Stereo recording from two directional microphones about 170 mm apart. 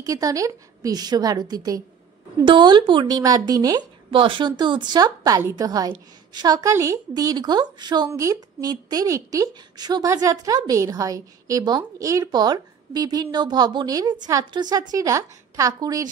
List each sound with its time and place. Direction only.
0.0 s speech: 20° right (ahead or behind)